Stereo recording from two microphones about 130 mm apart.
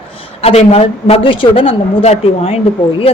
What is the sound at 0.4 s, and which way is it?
A man's voice, 50° left (ahead or behind).